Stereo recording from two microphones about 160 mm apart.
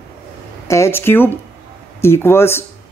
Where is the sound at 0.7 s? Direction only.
15° left (ahead or behind).